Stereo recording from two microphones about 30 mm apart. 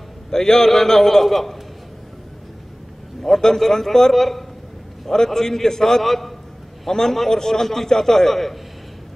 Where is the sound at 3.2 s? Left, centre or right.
Centre.